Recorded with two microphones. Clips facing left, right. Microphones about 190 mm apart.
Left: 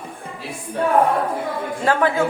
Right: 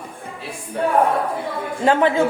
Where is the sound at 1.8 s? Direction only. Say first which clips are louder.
Right 3 dB; 20° right (ahead or behind).